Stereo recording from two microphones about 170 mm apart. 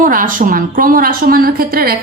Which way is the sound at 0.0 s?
55° right (ahead or behind).